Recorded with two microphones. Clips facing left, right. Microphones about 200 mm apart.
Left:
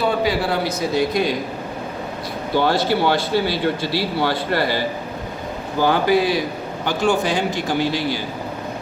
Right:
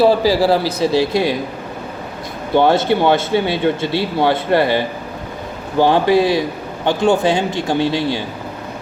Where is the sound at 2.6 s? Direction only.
25° right (ahead or behind).